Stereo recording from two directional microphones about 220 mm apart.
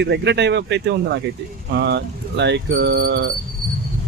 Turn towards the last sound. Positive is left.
turn(degrees=-45)  # may be behind; listen again after turning